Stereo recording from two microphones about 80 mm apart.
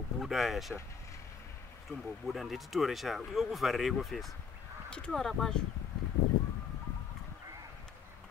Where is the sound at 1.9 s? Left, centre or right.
Centre.